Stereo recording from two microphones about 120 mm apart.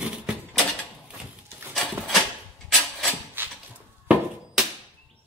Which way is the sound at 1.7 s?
Centre (ahead or behind).